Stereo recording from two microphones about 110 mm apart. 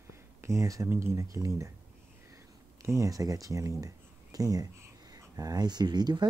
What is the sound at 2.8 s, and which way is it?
Speech, 30° right (ahead or behind).